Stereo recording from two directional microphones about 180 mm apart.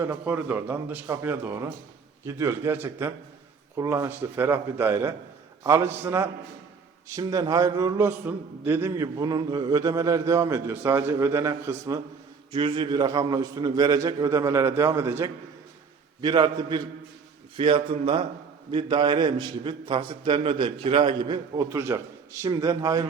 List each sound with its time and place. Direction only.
0.0 s a man's voice: 10° right (ahead or behind)
12.5 s a man's voice: 30° right (ahead or behind)